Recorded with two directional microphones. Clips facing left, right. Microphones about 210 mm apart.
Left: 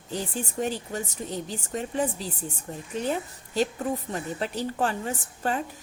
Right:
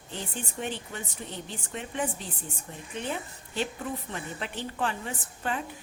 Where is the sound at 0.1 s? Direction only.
40° left (ahead or behind).